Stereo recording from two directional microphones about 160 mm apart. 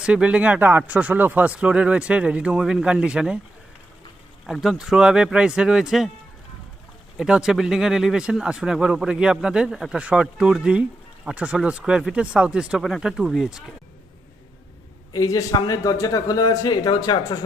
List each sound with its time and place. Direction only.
0.0 s speech: 5° right (ahead or behind)
4.4 s speech: centre (ahead or behind)
7.2 s speech: 5° right (ahead or behind)
15.1 s speech: 20° left (ahead or behind)